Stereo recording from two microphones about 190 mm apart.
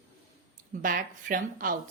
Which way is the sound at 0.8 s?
45° right (ahead or behind).